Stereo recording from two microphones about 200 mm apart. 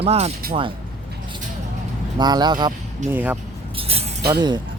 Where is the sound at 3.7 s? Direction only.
30° right (ahead or behind).